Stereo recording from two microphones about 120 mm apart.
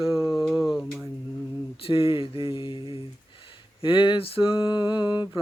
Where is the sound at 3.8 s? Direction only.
45° left (ahead or behind).